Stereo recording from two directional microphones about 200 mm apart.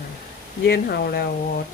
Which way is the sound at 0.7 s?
50° left (ahead or behind).